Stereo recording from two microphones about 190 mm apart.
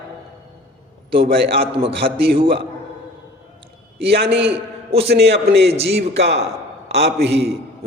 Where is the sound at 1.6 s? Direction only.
30° right (ahead or behind).